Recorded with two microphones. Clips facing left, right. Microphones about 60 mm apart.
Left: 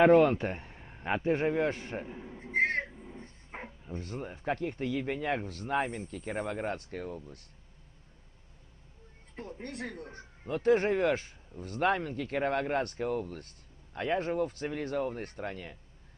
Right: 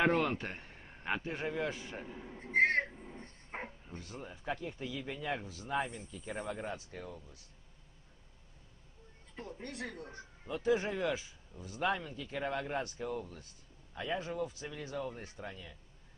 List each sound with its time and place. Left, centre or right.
0.0 s a man's voice: centre
1.2 s a man's voice: left
2.1 s speech: centre
2.4 s a sound: centre
2.9 s dog: centre
3.5 s bow-wow: centre
4.0 s speech: left
9.3 s a man's voice: left
10.0 s a sound: left
10.5 s speech: left